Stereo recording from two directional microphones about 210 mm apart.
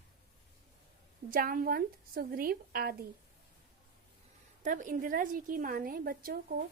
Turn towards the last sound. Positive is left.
turn(degrees=-45)  # may be behind; listen again after turning